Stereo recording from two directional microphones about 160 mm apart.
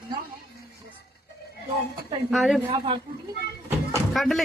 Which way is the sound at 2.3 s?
Centre (ahead or behind).